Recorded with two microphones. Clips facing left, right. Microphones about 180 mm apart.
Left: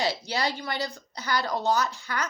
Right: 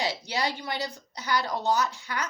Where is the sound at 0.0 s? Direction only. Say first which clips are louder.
Left 2 dB; 20° right (ahead or behind).